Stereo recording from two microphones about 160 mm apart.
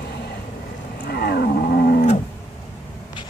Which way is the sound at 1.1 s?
75° left (ahead or behind).